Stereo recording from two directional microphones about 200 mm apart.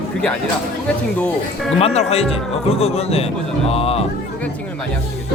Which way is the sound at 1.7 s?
30° left (ahead or behind).